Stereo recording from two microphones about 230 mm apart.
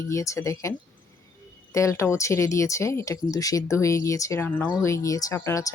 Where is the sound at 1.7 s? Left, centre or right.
Centre.